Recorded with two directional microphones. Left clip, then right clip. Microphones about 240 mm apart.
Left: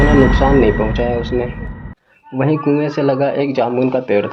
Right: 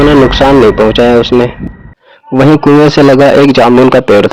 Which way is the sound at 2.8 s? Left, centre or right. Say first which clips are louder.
Right 12 dB; right.